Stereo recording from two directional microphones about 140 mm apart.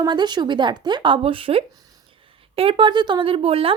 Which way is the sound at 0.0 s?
30° right (ahead or behind).